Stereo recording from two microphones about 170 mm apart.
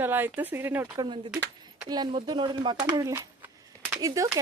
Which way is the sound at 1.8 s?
25° right (ahead or behind).